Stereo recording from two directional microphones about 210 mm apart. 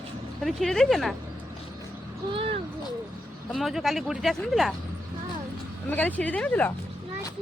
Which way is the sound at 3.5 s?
Centre (ahead or behind).